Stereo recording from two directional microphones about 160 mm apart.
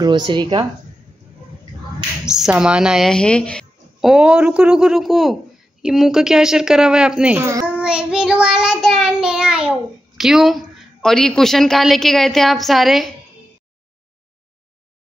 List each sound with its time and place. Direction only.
0.0 s a woman's voice: 30° right (ahead or behind)
2.2 s child singing: 5° right (ahead or behind)